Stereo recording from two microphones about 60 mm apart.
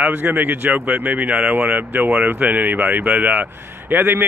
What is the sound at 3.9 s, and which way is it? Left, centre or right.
Speech, right.